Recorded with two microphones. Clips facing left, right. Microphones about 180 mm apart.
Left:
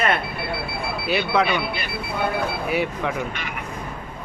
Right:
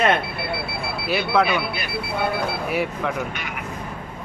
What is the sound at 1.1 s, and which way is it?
Speech, centre (ahead or behind).